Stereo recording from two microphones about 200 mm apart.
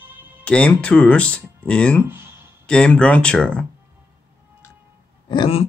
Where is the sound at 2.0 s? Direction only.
10° right (ahead or behind).